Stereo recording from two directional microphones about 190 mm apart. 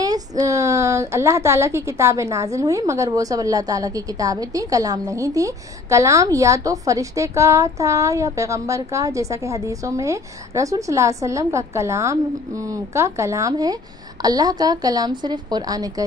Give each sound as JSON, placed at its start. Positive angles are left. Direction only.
{"t": 0.0, "sound": "a woman's voice", "side_deg": -20}